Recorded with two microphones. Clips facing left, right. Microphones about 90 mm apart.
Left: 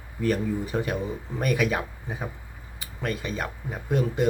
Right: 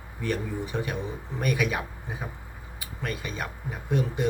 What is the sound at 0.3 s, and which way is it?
Speech, 40° left (ahead or behind).